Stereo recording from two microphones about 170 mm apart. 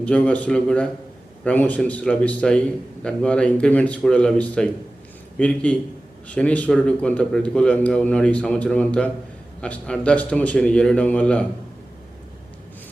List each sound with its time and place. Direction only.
0.0 s a man's voice: 10° left (ahead or behind)